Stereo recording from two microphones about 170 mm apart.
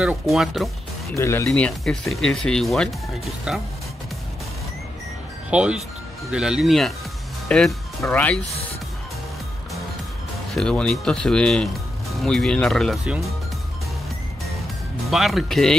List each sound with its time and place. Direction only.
0.0 s speech: 5° right (ahead or behind)
1.1 s speech: 15° left (ahead or behind)
1.5 s speech: 5° left (ahead or behind)
5.5 s speech: 5° right (ahead or behind); by 8.4 s 10° left (ahead or behind)
10.5 s speech: 5° left (ahead or behind)
15.0 s speech: centre (ahead or behind)